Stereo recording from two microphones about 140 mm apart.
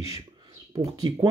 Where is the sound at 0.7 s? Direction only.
25° right (ahead or behind).